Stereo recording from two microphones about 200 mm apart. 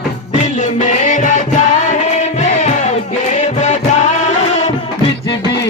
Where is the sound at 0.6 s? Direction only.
40° left (ahead or behind).